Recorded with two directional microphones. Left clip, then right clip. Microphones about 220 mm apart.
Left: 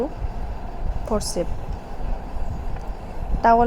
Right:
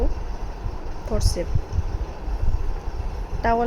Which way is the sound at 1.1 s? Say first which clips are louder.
Left 3 dB; 15° left (ahead or behind).